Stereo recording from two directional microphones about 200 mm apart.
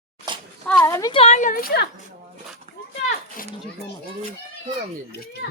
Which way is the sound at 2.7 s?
40° right (ahead or behind).